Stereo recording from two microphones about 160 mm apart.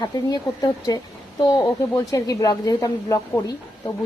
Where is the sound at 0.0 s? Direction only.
25° left (ahead or behind).